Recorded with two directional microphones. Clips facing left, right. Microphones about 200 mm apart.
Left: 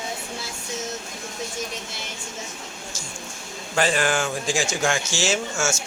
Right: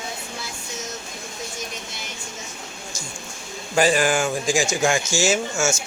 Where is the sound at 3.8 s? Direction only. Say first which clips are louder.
Right 3 dB; 10° right (ahead or behind).